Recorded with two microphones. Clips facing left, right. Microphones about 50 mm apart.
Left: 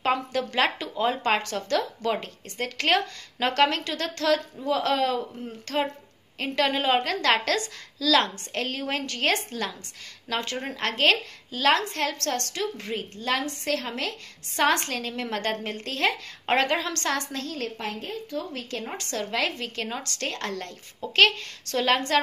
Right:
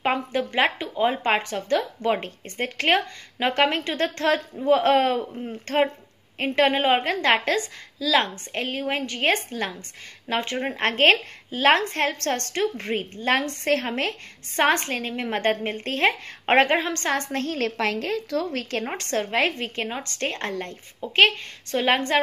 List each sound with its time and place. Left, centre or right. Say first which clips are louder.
0.0 s a woman's voice: right 1 dB; right
17.2 s a woman's voice: right 6 dB; right
17.6 s a woman's voice: right 8 dB; right